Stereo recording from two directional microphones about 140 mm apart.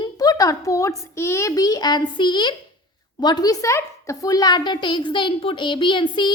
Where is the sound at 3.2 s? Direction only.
30° left (ahead or behind).